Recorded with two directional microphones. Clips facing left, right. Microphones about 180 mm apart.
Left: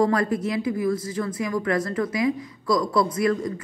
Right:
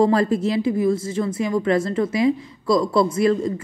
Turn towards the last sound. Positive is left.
turn(degrees=-25)  # may be behind; listen again after turning